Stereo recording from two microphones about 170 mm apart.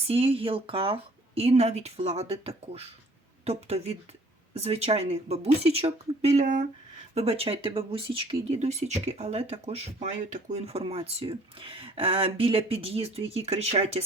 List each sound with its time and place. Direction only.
0.1 s speech: 35° right (ahead or behind)